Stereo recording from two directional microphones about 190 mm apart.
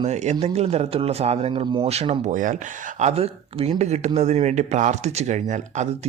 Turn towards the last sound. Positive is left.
turn(degrees=-40)  # may be behind; listen again after turning